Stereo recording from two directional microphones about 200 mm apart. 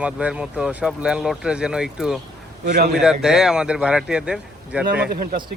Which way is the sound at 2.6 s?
50° right (ahead or behind).